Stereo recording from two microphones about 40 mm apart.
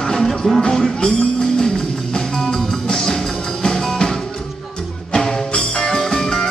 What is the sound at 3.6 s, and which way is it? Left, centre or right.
Music, centre.